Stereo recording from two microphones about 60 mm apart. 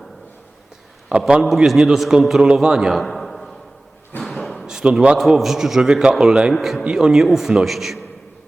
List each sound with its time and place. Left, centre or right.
1.1 s a man's voice: centre
1.5 s a man's voice: centre
3.0 s a sound: centre
4.6 s a man's voice: centre
6.8 s a man's voice: centre